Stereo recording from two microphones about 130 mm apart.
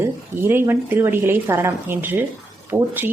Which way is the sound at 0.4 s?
15° right (ahead or behind).